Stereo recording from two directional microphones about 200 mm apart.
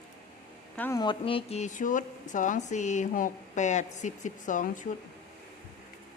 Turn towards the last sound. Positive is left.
turn(degrees=40)  # may be behind; listen again after turning